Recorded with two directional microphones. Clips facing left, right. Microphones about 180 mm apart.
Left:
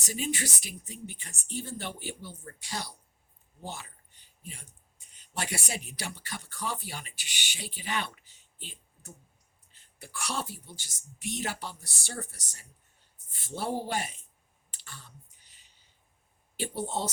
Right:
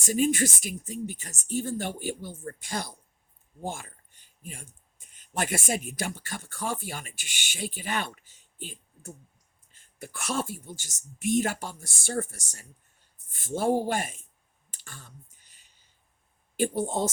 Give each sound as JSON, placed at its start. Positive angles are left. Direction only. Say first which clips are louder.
{"t": 0.0, "sound": "speech", "louder": "right 9 dB", "side_deg": -45}
{"t": 14.7, "sound": "clicking", "louder": "right 2 dB", "side_deg": -45}
{"t": 16.6, "sound": "speech", "louder": "right 6 dB", "side_deg": -50}